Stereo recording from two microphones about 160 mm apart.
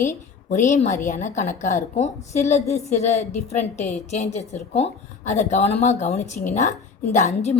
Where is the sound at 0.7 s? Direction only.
45° left (ahead or behind).